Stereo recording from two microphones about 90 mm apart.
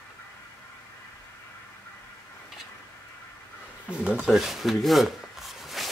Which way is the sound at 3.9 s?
10° right (ahead or behind).